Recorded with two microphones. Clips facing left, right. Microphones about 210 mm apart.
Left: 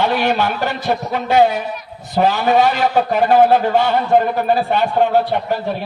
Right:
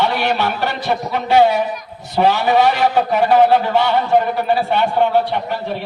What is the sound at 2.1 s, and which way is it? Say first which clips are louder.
A man's voice: even; 45° left (ahead or behind).